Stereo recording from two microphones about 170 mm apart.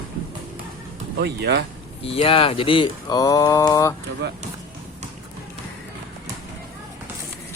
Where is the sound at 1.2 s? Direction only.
85° right.